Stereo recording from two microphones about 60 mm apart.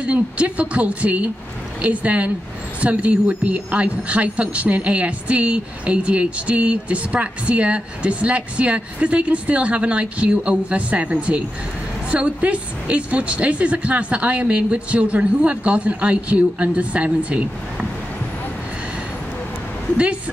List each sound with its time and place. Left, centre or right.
0.0 s speech: right